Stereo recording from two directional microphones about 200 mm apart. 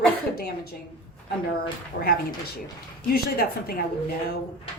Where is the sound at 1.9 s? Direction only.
50° left (ahead or behind).